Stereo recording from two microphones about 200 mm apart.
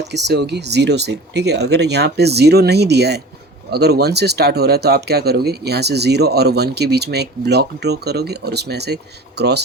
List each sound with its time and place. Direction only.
0.1 s speech: 55° right (ahead or behind)